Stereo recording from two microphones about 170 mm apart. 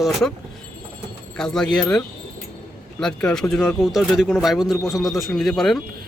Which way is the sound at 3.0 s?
5° left (ahead or behind).